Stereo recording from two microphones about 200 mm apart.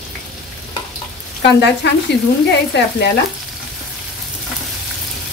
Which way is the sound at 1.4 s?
60° left (ahead or behind).